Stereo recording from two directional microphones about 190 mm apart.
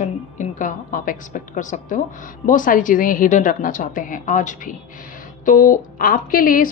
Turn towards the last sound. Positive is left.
turn(degrees=50)  # may be behind; listen again after turning